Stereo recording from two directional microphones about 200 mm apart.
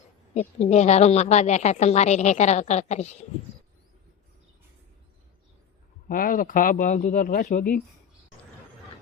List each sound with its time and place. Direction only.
0.3 s a woman's voice: 35° left (ahead or behind)
6.1 s speech: 45° left (ahead or behind)